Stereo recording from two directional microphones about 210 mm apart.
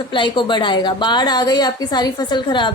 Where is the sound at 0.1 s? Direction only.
25° left (ahead or behind).